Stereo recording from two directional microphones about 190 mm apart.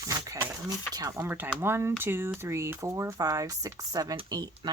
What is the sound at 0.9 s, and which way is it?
Speech, 15° right (ahead or behind).